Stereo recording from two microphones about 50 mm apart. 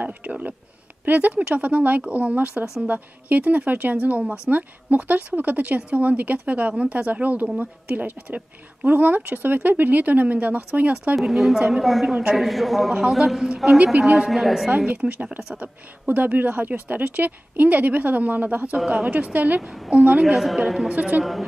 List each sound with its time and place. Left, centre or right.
0.0 s a woman's voice: right
11.1 s a woman's voice: centre
15.0 s speech: centre
15.5 s a woman's voice: right
20.2 s a woman's voice: centre
20.9 s speech: right
21.2 s a woman's voice: centre